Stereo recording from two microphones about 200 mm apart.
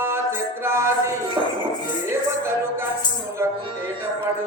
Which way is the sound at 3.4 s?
10° right (ahead or behind).